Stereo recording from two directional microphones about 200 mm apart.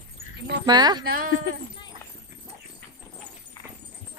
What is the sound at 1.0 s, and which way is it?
Speech, 45° right (ahead or behind).